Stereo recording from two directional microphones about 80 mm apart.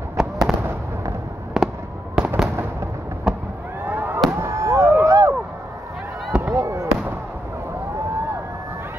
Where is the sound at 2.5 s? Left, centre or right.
Right.